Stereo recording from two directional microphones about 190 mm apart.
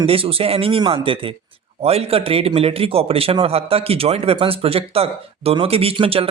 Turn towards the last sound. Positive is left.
turn(degrees=-30)  # may be behind; listen again after turning